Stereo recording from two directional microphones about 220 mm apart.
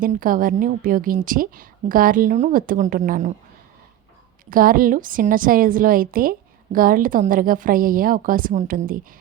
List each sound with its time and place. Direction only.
0.0 s a woman's voice: 40° right (ahead or behind)
4.4 s a woman's voice: 40° right (ahead or behind)